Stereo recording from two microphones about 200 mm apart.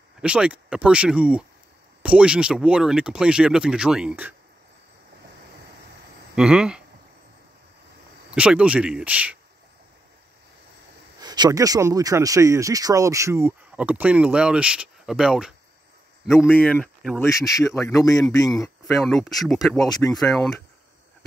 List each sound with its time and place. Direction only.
0.2 s speech: 5° right (ahead or behind)
6.3 s speech: 5° right (ahead or behind)
8.3 s speech: 5° right (ahead or behind)
11.1 s speech: 20° right (ahead or behind); by 16.5 s 5° right (ahead or behind)
16.5 s speech: 5° left (ahead or behind)
17.8 s speech: 15° left (ahead or behind)
18.9 s speech: centre (ahead or behind)
19.9 s speech: 20° left (ahead or behind)
20.2 s speech: centre (ahead or behind)